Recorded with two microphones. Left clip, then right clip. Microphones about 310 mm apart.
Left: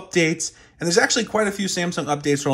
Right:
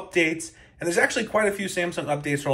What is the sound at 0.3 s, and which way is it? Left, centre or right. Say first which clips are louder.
Speech: left 4 dB; centre.